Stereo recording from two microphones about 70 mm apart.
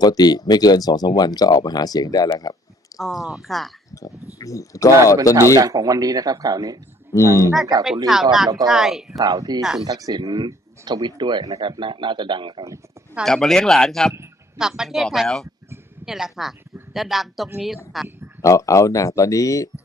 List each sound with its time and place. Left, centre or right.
0.0 s speech: left
3.0 s speech: centre
3.9 s speech: left
4.9 s speech: right
5.6 s speech: right
7.2 s speech: right
8.1 s speech: centre
9.2 s speech: right
9.6 s speech: centre
9.8 s speech: right
13.2 s speech: centre
14.6 s speech: centre
18.4 s speech: left